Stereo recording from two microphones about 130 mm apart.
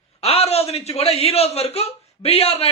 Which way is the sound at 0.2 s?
50° left (ahead or behind).